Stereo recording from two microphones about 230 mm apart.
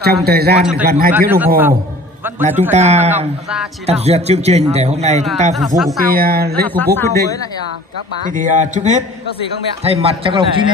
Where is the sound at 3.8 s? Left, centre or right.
Right.